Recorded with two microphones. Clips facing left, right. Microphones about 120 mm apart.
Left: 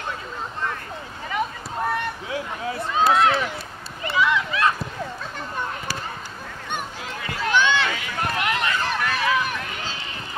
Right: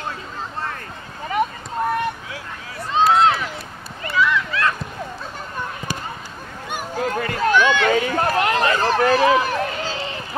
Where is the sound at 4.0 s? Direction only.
20° left (ahead or behind).